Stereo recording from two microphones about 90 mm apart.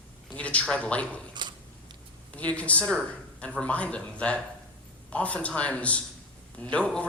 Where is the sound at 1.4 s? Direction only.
55° right (ahead or behind).